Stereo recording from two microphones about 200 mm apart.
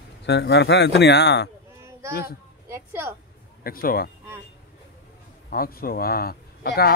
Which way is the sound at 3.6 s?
50° left (ahead or behind).